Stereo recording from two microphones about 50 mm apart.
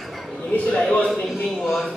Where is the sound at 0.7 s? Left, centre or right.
Left.